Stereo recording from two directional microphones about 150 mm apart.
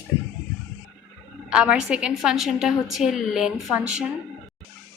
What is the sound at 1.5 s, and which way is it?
A woman's voice, 5° right (ahead or behind).